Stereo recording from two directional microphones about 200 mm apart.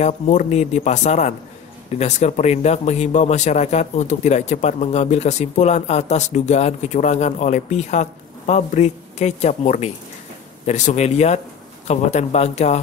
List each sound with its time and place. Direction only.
0.0 s a man's voice: 35° left (ahead or behind)